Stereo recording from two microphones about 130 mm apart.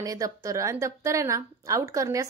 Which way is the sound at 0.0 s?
25° right (ahead or behind).